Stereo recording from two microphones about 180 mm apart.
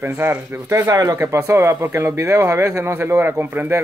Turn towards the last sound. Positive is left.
turn(degrees=-10)  # may be behind; listen again after turning